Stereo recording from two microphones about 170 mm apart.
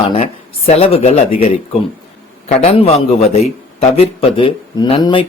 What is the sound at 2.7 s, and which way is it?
Speech, 35° left (ahead or behind).